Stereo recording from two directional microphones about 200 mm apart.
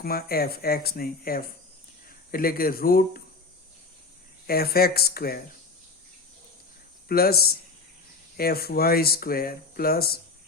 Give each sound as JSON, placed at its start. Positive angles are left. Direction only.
{"t": 0.0, "sound": "speech", "side_deg": 50}
{"t": 4.4, "sound": "speech", "side_deg": 50}
{"t": 7.1, "sound": "speech", "side_deg": 50}